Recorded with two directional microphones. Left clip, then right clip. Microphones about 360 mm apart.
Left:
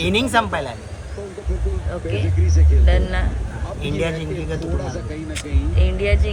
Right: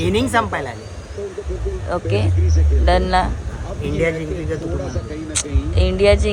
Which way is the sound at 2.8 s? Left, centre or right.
Centre.